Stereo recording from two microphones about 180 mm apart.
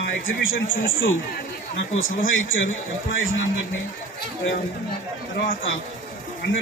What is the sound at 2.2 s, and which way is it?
A man's voice, 90° left.